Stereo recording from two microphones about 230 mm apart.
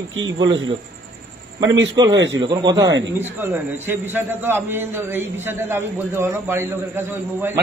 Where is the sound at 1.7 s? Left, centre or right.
Right.